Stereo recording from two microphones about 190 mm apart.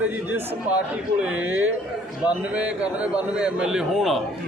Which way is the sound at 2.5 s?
5° right (ahead or behind).